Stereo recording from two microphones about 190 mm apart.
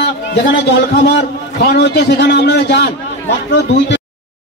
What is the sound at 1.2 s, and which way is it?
A man's voice, 60° left (ahead or behind).